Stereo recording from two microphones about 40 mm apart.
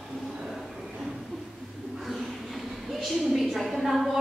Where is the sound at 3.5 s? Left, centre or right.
Centre.